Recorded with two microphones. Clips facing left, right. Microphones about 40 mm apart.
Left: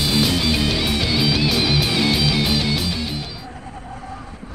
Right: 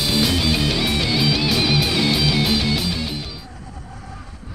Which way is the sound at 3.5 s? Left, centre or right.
Left.